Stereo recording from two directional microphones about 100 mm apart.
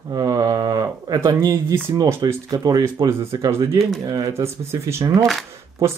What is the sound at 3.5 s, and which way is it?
Speech, 30° right (ahead or behind).